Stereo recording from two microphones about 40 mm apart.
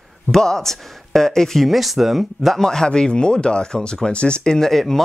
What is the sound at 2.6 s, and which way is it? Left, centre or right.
Speech, centre.